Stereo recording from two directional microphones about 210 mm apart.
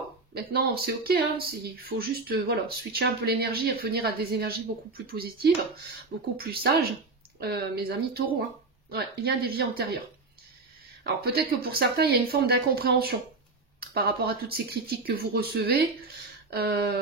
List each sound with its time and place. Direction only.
0.3 s speech: 50° right (ahead or behind)
11.1 s speech: 50° right (ahead or behind)